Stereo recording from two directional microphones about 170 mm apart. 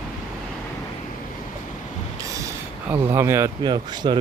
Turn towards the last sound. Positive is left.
turn(degrees=-25)  # may be behind; listen again after turning